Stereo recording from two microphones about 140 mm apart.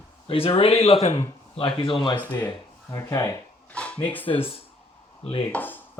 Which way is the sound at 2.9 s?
20° left (ahead or behind).